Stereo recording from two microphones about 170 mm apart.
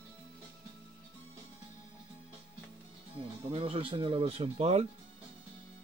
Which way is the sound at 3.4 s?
35° right (ahead or behind).